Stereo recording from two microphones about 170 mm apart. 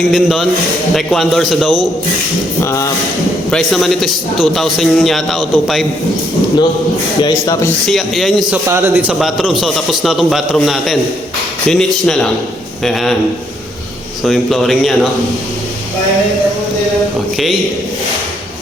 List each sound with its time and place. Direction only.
0.1 s a man's voice: centre (ahead or behind)
3.5 s a man's voice: centre (ahead or behind)
7.2 s a man's voice: 20° left (ahead or behind)
7.9 s a man's voice: centre (ahead or behind)
14.3 s a man's voice: centre (ahead or behind)